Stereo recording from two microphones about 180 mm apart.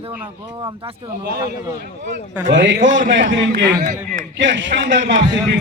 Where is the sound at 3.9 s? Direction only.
85° right.